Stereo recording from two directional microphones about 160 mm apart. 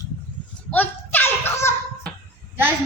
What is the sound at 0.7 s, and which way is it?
A child's voice, 10° left (ahead or behind).